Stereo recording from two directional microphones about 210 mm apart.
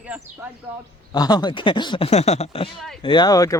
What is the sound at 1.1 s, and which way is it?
A man's voice, 20° left (ahead or behind).